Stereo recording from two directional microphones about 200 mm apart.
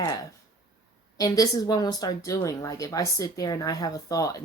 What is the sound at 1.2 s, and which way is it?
Speech, 20° left (ahead or behind).